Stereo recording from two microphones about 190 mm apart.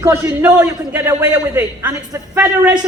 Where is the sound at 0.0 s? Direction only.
15° right (ahead or behind).